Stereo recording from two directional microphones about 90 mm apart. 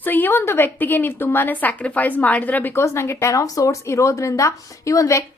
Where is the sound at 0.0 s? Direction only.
20° left (ahead or behind).